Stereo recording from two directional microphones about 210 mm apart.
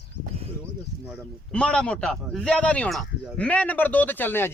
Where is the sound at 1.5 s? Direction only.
5° left (ahead or behind).